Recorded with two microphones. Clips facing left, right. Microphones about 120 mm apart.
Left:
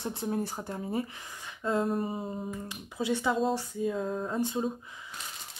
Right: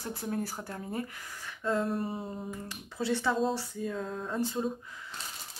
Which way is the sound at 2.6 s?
15° left (ahead or behind).